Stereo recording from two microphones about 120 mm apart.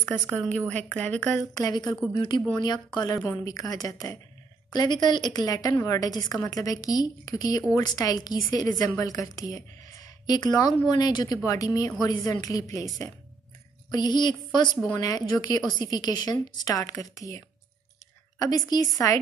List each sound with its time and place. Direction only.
0.7 s speech: 10° left (ahead or behind)
1.5 s a woman's voice: 30° left (ahead or behind)
13.8 s a woman's voice: 35° left (ahead or behind)
18.4 s a woman's voice: 30° left (ahead or behind)